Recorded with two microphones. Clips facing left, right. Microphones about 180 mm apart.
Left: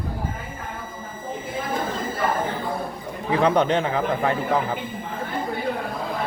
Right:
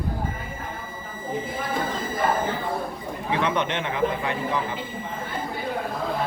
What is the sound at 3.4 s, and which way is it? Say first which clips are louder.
A man's voice: left 8 dB; 35° left (ahead or behind).